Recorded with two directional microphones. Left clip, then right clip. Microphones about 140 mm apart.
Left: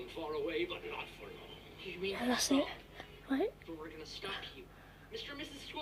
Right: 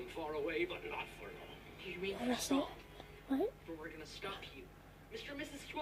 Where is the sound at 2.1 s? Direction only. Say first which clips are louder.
Left 5 dB; 20° left (ahead or behind).